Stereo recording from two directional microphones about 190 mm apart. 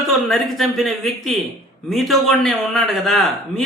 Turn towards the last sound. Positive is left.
turn(degrees=0)  # may be behind; listen again after turning